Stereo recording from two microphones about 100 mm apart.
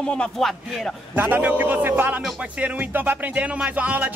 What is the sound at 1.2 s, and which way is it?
Speech, 15° right (ahead or behind).